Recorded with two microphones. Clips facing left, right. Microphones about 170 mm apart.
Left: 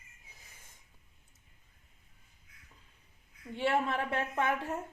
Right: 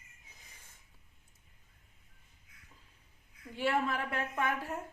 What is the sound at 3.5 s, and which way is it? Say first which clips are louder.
Speech: left 1 dB; 25° left (ahead or behind).